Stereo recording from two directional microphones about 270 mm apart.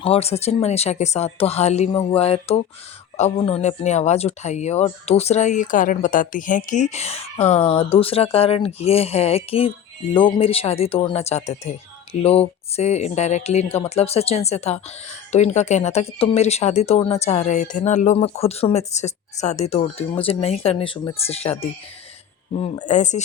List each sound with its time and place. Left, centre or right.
0.0 s speech: left